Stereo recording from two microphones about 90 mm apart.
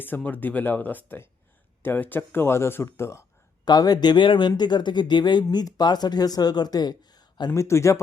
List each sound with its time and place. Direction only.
0.2 s speech: 20° left (ahead or behind)
3.7 s speech: 45° left (ahead or behind)
7.5 s speech: 35° left (ahead or behind)